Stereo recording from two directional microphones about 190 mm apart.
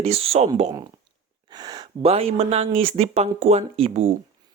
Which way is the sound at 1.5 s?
20° right (ahead or behind).